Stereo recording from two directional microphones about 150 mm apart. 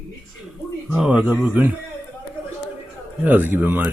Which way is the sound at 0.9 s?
5° right (ahead or behind).